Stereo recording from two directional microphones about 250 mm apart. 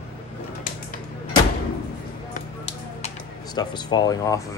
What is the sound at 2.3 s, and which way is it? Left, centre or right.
Music, left.